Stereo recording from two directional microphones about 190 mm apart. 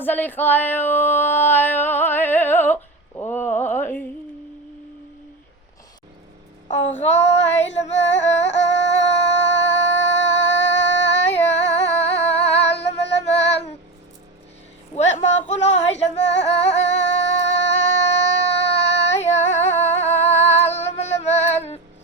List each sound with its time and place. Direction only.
0.0 s female singing: 10° left (ahead or behind)
3.2 s a sound: 10° left (ahead or behind)
6.7 s female singing: 35° left (ahead or behind)
10.2 s music: 35° left (ahead or behind)
13.2 s female singing: 35° left (ahead or behind)
14.9 s a sound: 40° left (ahead or behind)
16.4 s singing: 35° left (ahead or behind)
17.5 s music: 35° left (ahead or behind)